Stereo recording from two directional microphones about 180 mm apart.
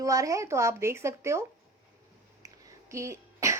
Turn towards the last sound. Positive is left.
turn(degrees=-15)  # may be behind; listen again after turning